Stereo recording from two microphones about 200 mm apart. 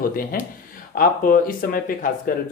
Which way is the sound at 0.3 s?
45° left (ahead or behind).